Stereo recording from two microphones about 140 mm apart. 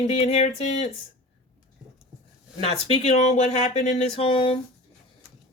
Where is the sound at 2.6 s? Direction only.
45° left (ahead or behind).